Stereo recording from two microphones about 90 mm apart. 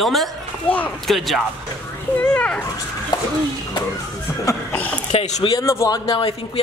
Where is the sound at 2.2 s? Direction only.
15° left (ahead or behind).